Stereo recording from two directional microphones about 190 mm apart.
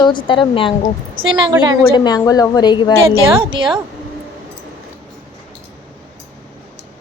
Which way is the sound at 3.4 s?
25° right (ahead or behind).